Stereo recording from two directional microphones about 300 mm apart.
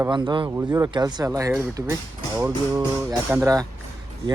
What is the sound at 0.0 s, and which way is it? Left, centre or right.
Speech, centre.